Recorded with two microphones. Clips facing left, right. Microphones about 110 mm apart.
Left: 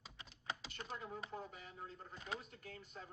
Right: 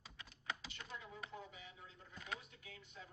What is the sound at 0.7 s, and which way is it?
Computer keyboard, 45° left (ahead or behind).